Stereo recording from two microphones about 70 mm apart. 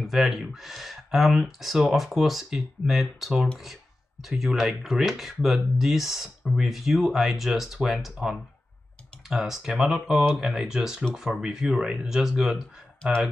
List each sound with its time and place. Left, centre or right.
0.0 s speech: centre